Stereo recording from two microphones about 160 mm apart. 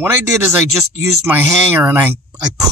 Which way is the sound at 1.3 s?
10° right (ahead or behind).